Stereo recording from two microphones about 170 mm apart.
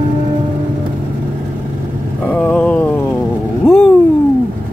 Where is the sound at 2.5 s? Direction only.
10° left (ahead or behind).